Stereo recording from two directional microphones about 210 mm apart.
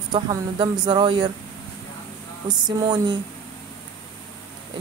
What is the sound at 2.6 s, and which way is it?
Speech, 20° right (ahead or behind).